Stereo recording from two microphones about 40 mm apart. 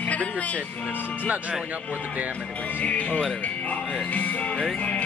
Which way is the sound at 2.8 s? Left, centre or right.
Left.